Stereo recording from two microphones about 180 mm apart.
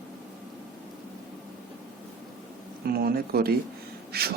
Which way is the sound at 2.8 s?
60° right (ahead or behind).